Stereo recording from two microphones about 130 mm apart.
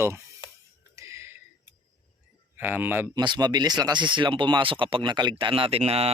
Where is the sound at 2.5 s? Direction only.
15° right (ahead or behind).